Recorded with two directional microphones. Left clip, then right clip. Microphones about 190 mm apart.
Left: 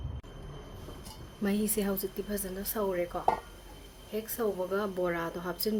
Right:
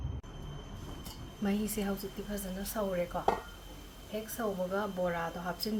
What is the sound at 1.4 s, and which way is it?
A woman's voice, 55° left (ahead or behind).